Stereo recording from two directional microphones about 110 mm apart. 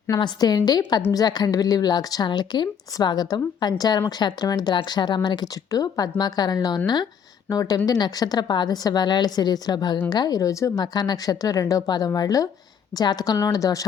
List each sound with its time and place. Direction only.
0.2 s speech: 40° left (ahead or behind)